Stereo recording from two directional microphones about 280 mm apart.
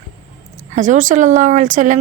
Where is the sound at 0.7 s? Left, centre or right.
Right.